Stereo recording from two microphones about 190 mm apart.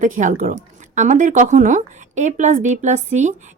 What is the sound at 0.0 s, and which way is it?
Speech, 40° right (ahead or behind).